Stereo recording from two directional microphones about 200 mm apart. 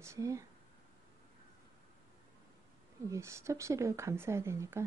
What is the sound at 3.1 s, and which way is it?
Speech, 15° right (ahead or behind).